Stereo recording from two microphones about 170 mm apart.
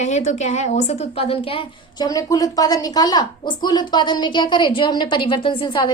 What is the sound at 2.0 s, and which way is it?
A woman's voice, 20° left (ahead or behind).